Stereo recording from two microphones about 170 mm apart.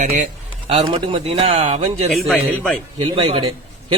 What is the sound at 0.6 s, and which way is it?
Speech, 30° right (ahead or behind).